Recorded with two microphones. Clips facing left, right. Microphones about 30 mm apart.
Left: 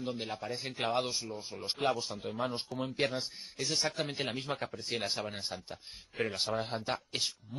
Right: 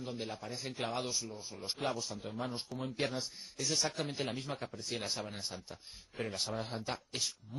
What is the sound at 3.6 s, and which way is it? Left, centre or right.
Speech, centre.